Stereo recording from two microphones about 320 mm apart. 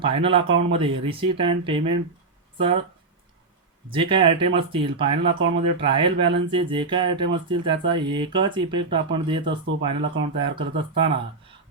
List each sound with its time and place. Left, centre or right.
0.0 s speech: centre
3.9 s speech: centre